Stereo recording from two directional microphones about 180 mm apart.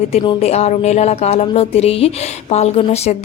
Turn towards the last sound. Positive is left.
turn(degrees=35)  # may be behind; listen again after turning